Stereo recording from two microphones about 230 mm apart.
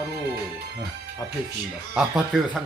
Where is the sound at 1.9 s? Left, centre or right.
Centre.